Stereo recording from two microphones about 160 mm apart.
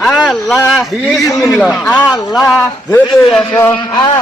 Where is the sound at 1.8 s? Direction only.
15° left (ahead or behind).